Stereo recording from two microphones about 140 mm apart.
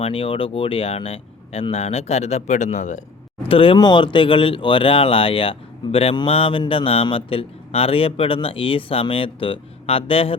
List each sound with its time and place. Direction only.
0.0 s speech: 40° left (ahead or behind); by 3.0 s 60° left (ahead or behind)
3.5 s speech: 40° left (ahead or behind)